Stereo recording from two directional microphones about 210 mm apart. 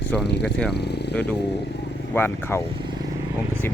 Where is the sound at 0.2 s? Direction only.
55° left (ahead or behind).